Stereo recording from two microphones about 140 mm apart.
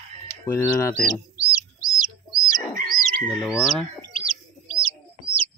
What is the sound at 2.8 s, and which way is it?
Chicken, 90° right.